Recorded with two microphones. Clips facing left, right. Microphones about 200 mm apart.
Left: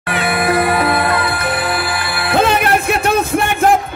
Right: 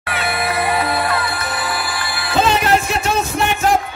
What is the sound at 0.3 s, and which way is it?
Music, 55° left (ahead or behind).